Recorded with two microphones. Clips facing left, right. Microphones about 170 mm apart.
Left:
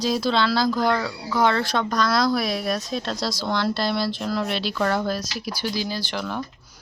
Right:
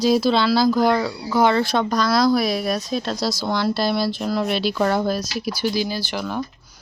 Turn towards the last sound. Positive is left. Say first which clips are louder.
# right 3 dB
turn(degrees=-5)  # may be behind; listen again after turning